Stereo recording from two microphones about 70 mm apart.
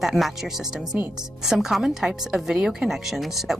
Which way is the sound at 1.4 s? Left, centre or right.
Centre.